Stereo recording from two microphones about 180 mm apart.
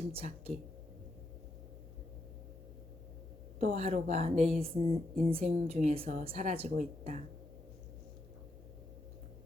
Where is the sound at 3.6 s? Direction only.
35° right (ahead or behind).